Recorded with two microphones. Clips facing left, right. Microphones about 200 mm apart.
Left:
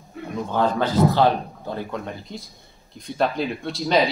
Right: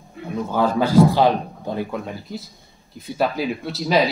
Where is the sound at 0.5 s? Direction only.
10° right (ahead or behind).